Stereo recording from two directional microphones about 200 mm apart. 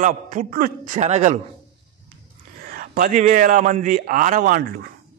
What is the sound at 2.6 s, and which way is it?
A man's voice, 45° right (ahead or behind).